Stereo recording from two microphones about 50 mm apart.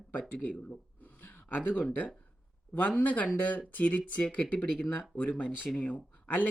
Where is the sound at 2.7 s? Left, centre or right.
Left.